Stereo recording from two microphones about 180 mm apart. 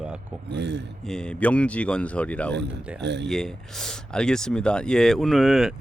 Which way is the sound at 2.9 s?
70° right (ahead or behind).